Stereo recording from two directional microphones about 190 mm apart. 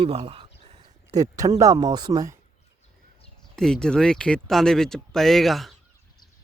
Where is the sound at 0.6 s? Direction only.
30° right (ahead or behind).